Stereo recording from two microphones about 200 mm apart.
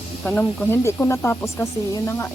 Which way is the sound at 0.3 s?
10° left (ahead or behind).